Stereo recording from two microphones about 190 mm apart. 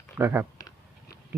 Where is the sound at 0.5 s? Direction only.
20° left (ahead or behind).